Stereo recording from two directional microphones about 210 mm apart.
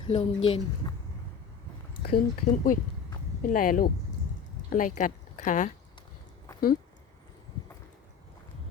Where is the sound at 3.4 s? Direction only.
40° left (ahead or behind).